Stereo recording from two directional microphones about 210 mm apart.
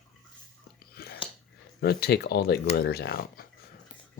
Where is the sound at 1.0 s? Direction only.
45° left (ahead or behind).